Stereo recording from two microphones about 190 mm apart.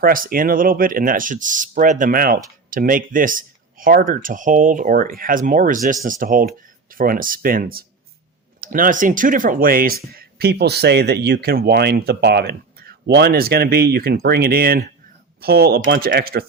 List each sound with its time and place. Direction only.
0.0 s speech: 50° right (ahead or behind)